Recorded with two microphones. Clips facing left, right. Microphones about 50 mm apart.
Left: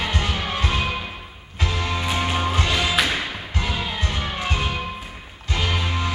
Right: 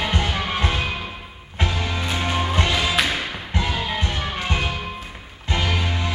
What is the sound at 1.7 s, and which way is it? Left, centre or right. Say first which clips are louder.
Music: left 1 dB; centre.